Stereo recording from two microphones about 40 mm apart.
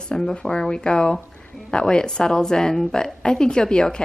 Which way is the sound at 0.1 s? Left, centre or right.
Centre.